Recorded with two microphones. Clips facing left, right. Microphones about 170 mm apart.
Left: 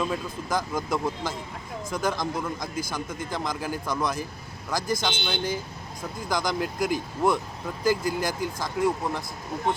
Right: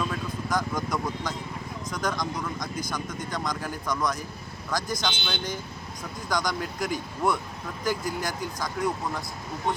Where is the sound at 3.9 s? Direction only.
30° left (ahead or behind).